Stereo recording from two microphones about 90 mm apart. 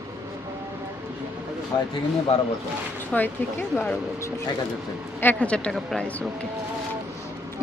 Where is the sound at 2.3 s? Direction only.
90° left.